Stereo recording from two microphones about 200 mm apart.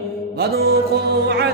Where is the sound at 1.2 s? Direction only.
55° right (ahead or behind).